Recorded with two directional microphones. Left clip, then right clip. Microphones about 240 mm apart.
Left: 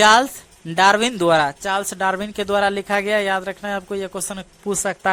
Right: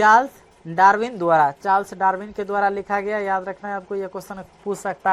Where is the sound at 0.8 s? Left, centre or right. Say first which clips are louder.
Left 1 dB; left.